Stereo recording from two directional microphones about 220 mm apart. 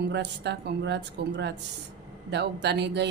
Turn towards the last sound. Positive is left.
turn(degrees=-50)  # may be behind; listen again after turning